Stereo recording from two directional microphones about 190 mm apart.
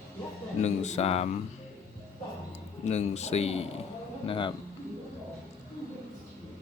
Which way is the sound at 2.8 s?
35° left (ahead or behind).